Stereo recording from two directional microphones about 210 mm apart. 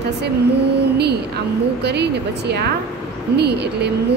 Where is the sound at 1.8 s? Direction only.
50° right (ahead or behind).